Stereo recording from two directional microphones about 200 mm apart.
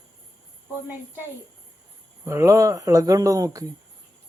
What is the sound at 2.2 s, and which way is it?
Speech, 15° right (ahead or behind).